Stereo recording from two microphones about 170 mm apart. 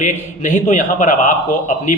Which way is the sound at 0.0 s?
45° left (ahead or behind).